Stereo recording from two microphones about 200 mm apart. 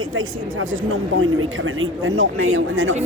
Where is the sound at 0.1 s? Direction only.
80° right.